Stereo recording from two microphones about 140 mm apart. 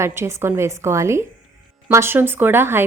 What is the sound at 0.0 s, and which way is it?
A woman's voice, 20° right (ahead or behind).